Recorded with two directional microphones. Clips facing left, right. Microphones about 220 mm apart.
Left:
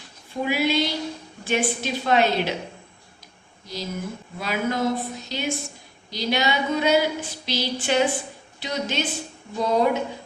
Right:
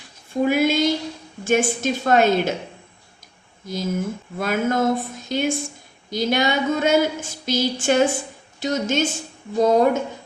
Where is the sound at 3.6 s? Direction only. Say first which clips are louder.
Right 6 dB; 50° right (ahead or behind).